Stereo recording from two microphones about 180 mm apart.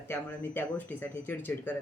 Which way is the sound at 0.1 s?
10° left (ahead or behind).